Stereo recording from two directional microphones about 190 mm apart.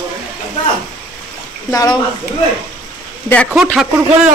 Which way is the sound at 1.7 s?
20° left (ahead or behind).